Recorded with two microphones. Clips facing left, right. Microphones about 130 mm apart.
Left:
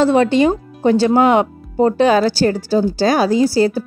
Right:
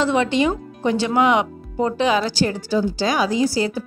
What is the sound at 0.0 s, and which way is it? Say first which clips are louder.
Speech: left 6 dB; 40° left (ahead or behind).